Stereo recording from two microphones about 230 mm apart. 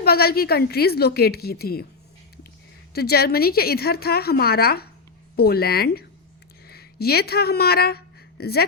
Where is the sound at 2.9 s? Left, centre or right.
Left.